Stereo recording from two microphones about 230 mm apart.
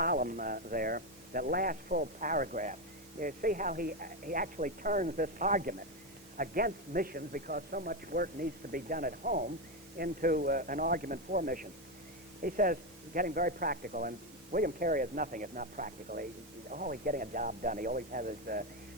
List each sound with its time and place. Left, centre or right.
0.0 s a man's voice: right